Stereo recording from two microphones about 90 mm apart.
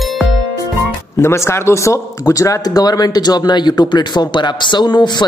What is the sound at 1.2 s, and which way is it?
Speech, 30° left (ahead or behind).